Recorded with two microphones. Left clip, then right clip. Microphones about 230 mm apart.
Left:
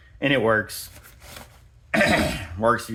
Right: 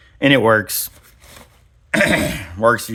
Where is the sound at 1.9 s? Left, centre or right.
Right.